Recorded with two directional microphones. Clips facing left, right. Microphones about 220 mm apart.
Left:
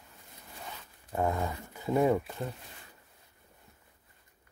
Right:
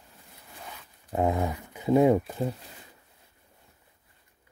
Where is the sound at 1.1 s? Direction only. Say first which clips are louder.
Right 4 dB; 20° right (ahead or behind).